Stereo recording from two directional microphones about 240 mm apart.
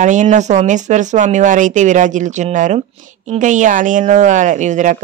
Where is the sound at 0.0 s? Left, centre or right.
Right.